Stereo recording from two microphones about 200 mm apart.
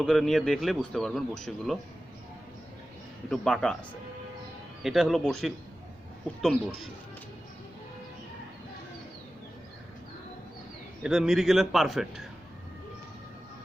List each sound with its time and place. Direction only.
0.0 s a man's voice: centre (ahead or behind)
3.2 s a man's voice: 5° left (ahead or behind)
4.8 s a man's voice: centre (ahead or behind)
11.0 s a man's voice: centre (ahead or behind)